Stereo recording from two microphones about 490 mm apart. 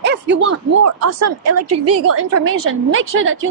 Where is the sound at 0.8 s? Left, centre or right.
Right.